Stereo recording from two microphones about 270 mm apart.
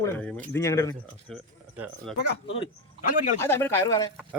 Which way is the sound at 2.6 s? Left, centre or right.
Left.